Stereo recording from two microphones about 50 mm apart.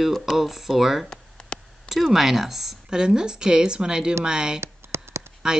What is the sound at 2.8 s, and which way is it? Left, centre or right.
Speech, centre.